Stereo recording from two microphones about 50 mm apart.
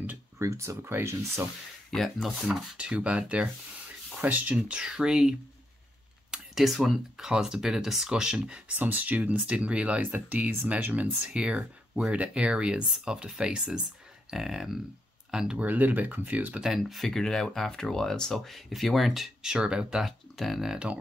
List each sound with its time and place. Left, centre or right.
0.4 s speech: right
1.9 s speech: centre
2.8 s speech: right
4.6 s speech: centre
6.5 s speech: centre
8.7 s speech: right
11.2 s speech: right
15.6 s speech: right
16.8 s speech: centre
19.4 s speech: centre
20.1 s speech: centre